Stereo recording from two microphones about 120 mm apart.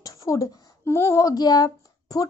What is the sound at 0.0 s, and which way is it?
A child's voice, 25° left (ahead or behind).